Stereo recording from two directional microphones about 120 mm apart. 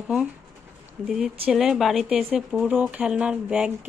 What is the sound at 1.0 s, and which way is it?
Speech, 5° right (ahead or behind).